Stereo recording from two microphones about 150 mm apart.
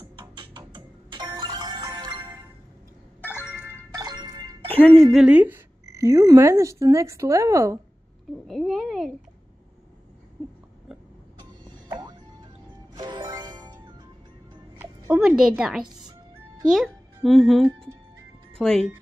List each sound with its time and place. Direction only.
0.2 s music: 30° right (ahead or behind)
3.2 s music: 15° left (ahead or behind)
3.7 s music: 25° right (ahead or behind)
4.7 s speech: 5° left (ahead or behind); by 7.8 s 20° right (ahead or behind)
8.5 s a child's voice: centre (ahead or behind)
11.9 s music: 25° right (ahead or behind)
15.1 s a child's voice: 5° right (ahead or behind)